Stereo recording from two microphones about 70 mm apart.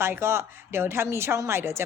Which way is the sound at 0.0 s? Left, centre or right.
Right.